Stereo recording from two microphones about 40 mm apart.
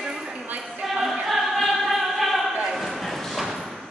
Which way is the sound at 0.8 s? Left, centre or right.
Centre.